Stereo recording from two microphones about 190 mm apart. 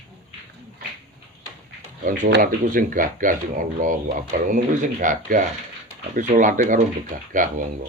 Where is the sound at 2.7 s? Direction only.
45° right (ahead or behind).